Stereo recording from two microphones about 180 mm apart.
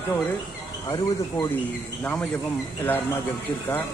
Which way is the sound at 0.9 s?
20° left (ahead or behind).